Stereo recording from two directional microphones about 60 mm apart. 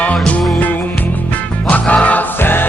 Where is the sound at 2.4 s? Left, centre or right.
Left.